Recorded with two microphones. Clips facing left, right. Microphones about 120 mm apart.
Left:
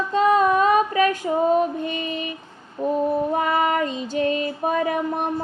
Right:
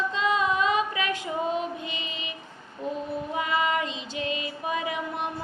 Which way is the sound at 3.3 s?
50° left (ahead or behind).